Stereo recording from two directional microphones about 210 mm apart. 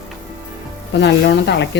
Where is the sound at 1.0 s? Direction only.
55° left (ahead or behind).